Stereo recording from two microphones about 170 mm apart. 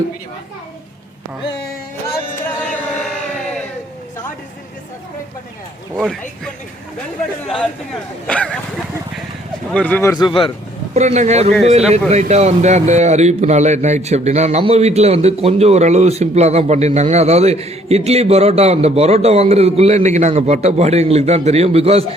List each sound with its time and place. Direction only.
2.6 s a sound: 5° left (ahead or behind)
6.0 s speech: 5° left (ahead or behind)
8.3 s speech: 5° left (ahead or behind)
9.7 s speech: 10° left (ahead or behind); by 10.5 s 30° left (ahead or behind)
10.9 s a man's voice: 40° right (ahead or behind)